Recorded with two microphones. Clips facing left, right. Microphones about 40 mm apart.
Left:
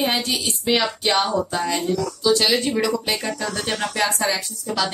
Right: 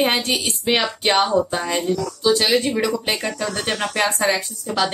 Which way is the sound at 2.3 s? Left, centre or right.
Centre.